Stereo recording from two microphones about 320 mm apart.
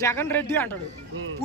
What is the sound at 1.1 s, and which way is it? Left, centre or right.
Music, right.